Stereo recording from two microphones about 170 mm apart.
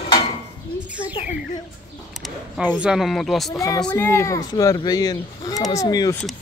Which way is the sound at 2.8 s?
Centre (ahead or behind).